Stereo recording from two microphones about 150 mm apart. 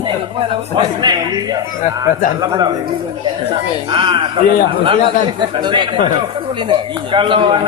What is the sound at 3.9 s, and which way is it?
Speech, 35° right (ahead or behind).